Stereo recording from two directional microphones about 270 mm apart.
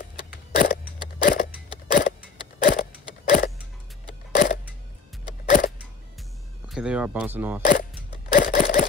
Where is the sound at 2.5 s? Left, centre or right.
Left.